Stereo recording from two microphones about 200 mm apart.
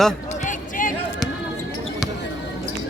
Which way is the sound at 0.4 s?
40° left (ahead or behind).